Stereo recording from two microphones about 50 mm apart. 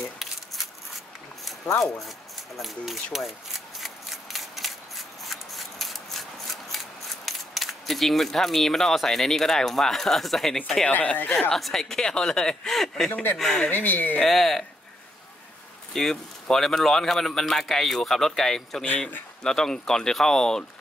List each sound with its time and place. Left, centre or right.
0.2 s a sound: centre
1.8 s speech: centre
2.6 s shuffling cards: centre
10.9 s speech: left
11.5 s a man's voice: centre
13.7 s speech: left
14.2 s speech: centre
15.9 s a man's voice: centre
18.9 s speech: left
19.4 s a man's voice: centre